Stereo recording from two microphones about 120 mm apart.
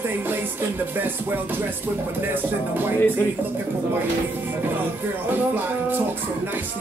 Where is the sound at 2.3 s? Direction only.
15° right (ahead or behind).